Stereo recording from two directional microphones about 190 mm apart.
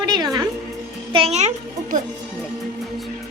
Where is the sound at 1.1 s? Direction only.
35° right (ahead or behind).